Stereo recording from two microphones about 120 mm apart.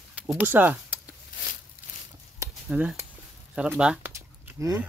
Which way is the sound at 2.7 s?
10° right (ahead or behind).